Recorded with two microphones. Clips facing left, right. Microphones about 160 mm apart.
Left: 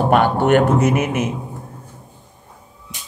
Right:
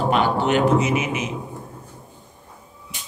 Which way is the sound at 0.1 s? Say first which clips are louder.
Left 6 dB; 55° left (ahead or behind).